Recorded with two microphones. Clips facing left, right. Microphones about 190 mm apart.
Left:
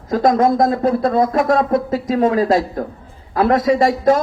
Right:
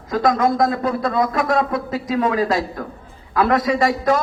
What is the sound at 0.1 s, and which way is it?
A man's voice, 30° left (ahead or behind).